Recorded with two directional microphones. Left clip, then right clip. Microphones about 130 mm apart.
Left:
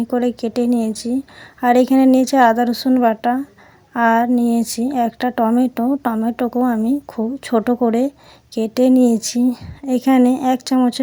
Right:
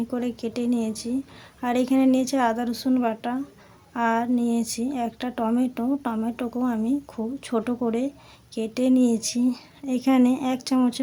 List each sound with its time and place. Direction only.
0.1 s a woman's voice: 40° left (ahead or behind)